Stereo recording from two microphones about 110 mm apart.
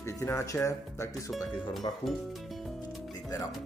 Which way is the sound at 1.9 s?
45° left (ahead or behind).